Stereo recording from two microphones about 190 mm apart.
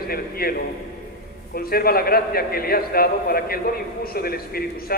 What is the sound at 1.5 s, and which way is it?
A man's voice, 50° left (ahead or behind).